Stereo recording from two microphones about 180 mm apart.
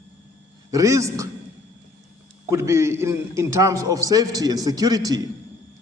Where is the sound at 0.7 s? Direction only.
20° right (ahead or behind).